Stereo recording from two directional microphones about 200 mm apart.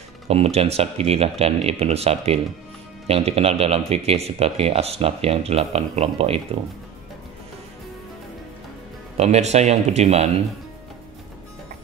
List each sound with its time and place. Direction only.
0.3 s speech: 30° right (ahead or behind)
9.1 s speech: 35° right (ahead or behind)